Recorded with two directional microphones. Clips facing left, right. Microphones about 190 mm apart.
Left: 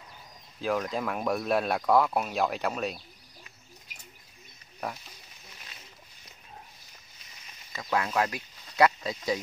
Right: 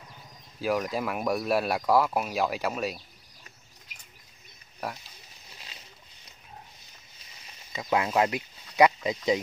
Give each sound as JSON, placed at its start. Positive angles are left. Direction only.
{"t": 0.6, "sound": "speech", "side_deg": -5}
{"t": 7.7, "sound": "speech", "side_deg": -20}